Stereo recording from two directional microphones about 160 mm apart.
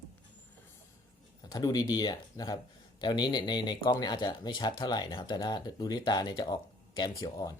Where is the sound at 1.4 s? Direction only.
25° left (ahead or behind).